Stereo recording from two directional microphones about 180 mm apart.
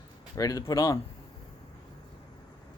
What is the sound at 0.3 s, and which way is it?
Speech, 20° left (ahead or behind).